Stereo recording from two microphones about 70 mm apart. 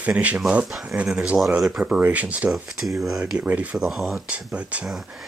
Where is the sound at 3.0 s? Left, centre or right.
Centre.